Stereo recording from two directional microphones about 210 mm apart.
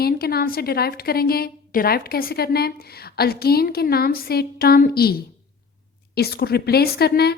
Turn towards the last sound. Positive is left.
turn(degrees=50)  # may be behind; listen again after turning